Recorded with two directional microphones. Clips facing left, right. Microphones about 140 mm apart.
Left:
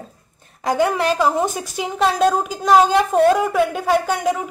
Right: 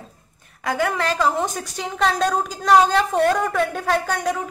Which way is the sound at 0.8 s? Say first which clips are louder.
Left 4 dB; 20° left (ahead or behind).